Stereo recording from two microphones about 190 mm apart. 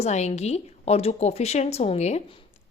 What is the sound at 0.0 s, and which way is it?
Speech, 35° left (ahead or behind).